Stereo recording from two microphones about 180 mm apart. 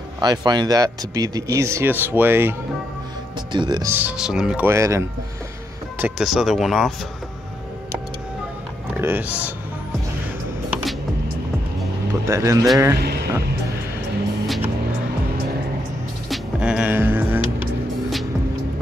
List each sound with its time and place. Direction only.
0.2 s speech: 25° right (ahead or behind)
3.5 s speech: 25° right (ahead or behind)
3.9 s speech: 5° right (ahead or behind)
4.6 s speech: 15° right (ahead or behind); by 6.9 s centre (ahead or behind)
8.9 s speech: 10° right (ahead or behind)
10.7 s music: centre (ahead or behind)
12.3 s speech: 15° right (ahead or behind)
12.9 s speech: 65° right (ahead or behind)
16.3 s music: 5° right (ahead or behind)